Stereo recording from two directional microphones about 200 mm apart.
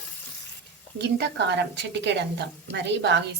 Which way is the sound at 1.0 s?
55° right (ahead or behind).